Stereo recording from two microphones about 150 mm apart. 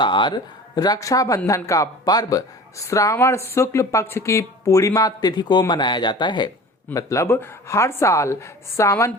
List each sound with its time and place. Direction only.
0.0 s speech: 30° left (ahead or behind)
6.9 s speech: 20° left (ahead or behind)